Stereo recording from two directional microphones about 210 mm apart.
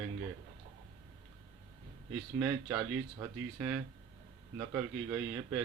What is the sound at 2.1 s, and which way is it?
A man's voice, 10° right (ahead or behind).